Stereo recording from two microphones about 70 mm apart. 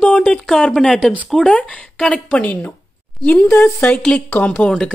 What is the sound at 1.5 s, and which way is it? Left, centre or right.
Speech, centre.